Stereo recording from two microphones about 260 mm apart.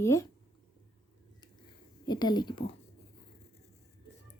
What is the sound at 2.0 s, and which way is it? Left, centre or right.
Speech, centre.